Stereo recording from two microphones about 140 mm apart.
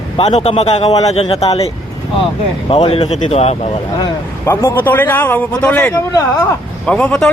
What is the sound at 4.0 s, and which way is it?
A man's voice, 20° left (ahead or behind).